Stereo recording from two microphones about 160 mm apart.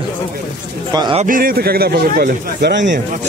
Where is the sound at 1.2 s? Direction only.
60° right (ahead or behind); by 3.0 s 90° right.